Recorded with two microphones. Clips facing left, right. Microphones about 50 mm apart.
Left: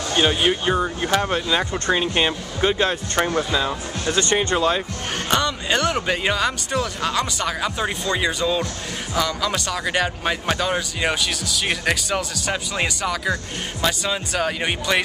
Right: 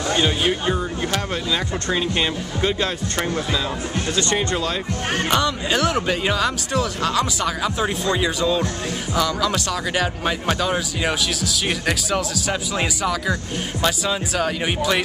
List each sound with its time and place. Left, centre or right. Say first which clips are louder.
0.1 s speech: left 2 dB; centre